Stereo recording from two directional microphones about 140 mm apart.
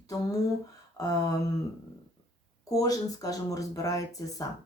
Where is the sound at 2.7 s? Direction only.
25° left (ahead or behind).